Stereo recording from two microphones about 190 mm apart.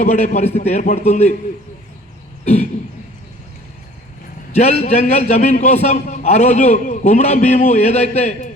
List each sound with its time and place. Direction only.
0.0 s a man's voice: 35° left (ahead or behind)
2.4 s throat clearing: 35° left (ahead or behind)
4.8 s a man's voice: 35° left (ahead or behind)